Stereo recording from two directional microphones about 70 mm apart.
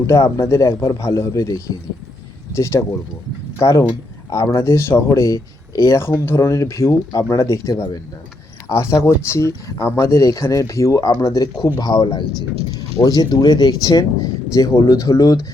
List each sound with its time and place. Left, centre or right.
0.1 s speech: left
6.2 s speech: left
11.6 s speech: left
13.0 s speech: left